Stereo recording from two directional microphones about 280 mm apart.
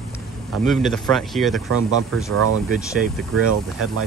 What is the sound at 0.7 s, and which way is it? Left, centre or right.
Speech, centre.